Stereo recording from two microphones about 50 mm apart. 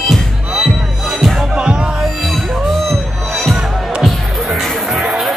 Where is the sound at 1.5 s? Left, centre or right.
Centre.